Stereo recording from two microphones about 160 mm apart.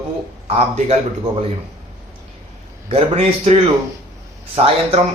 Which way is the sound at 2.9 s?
35° right (ahead or behind).